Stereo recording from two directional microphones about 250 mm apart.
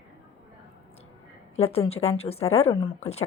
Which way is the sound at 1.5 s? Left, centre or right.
Left.